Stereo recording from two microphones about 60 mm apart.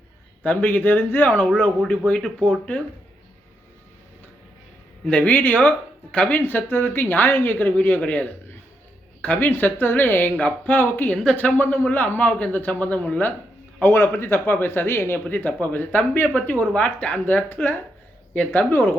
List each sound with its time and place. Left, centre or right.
0.4 s speech: left
1.9 s speech: centre
5.0 s a man's voice: centre
5.3 s a man's voice: left
10.3 s a man's voice: left
10.8 s speech: left
11.1 s speech: centre
11.3 s a man's voice: left
15.3 s a man's voice: left